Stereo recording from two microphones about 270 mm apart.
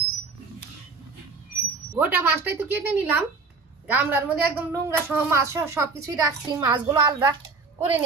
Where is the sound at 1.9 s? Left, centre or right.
Centre.